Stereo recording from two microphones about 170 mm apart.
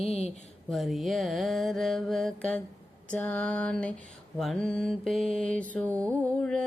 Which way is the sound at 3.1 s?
5° left (ahead or behind).